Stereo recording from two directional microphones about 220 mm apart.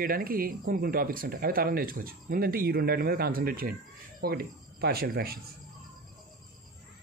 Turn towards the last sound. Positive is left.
turn(degrees=-45)  # may be behind; listen again after turning